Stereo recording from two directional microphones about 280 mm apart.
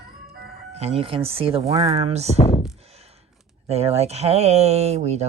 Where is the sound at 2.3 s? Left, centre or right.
Left.